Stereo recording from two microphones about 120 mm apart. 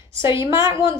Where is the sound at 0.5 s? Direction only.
40° left (ahead or behind).